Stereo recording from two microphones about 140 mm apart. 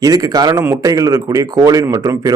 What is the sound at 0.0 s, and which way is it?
Speech, 25° right (ahead or behind).